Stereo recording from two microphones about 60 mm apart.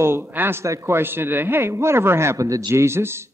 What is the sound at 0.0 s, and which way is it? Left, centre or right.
Speech, right.